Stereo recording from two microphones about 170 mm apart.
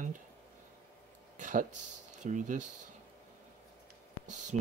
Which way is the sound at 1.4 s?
50° right (ahead or behind).